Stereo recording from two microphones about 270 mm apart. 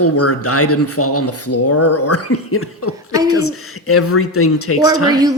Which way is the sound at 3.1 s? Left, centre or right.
Centre.